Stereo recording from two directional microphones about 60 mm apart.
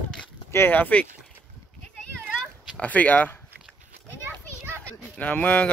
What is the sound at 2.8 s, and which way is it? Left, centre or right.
Speech, left.